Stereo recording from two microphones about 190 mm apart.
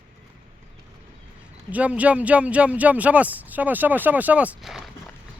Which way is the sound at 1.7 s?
5° right (ahead or behind).